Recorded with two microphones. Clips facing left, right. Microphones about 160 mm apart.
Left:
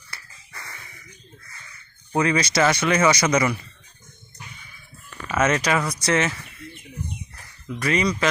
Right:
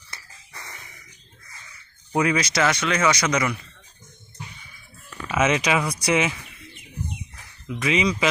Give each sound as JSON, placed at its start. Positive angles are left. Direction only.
{"t": 0.1, "sound": "a sound", "side_deg": -20}
{"t": 2.1, "sound": "speech", "side_deg": -5}
{"t": 5.3, "sound": "speech", "side_deg": -5}